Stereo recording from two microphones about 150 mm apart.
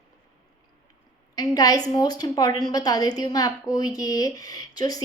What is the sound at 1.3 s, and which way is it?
Speech, 25° left (ahead or behind).